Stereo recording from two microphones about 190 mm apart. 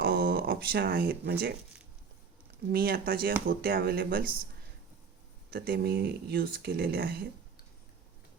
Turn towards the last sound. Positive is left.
turn(degrees=-55)  # may be behind; listen again after turning